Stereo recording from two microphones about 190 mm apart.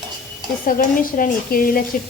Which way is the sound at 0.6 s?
45° left (ahead or behind).